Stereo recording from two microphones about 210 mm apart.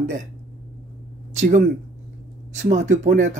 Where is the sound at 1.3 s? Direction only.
35° right (ahead or behind).